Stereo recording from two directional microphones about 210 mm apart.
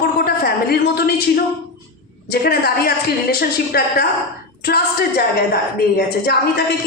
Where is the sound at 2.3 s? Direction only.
45° left (ahead or behind).